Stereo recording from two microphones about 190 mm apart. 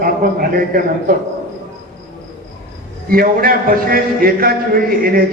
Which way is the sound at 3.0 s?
50° right (ahead or behind).